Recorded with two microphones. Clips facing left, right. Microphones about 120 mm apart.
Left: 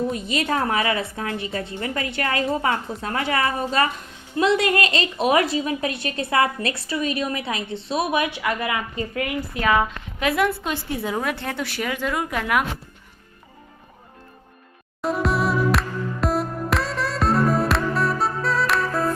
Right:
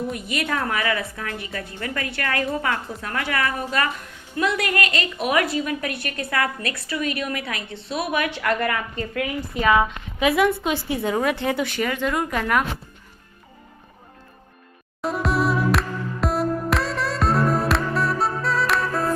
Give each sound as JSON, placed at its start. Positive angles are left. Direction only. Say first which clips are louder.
{"t": 0.1, "sound": "a woman's voice", "louder": "left 2 dB", "side_deg": 25}
{"t": 8.4, "sound": "a woman's voice", "louder": "right 2 dB", "side_deg": 5}
{"t": 15.0, "sound": "music", "louder": "even", "side_deg": 0}